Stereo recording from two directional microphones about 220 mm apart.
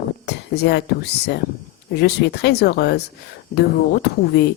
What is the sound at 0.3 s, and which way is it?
Speech, 50° left (ahead or behind).